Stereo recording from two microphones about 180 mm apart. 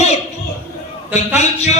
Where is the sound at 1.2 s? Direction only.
40° left (ahead or behind).